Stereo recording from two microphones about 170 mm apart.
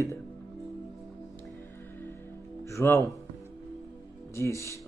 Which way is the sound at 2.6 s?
15° left (ahead or behind).